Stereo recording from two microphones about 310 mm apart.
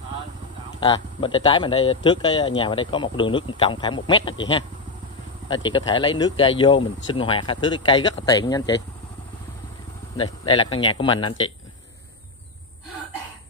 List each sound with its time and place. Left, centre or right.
0.7 s speech: centre
10.1 s speech: centre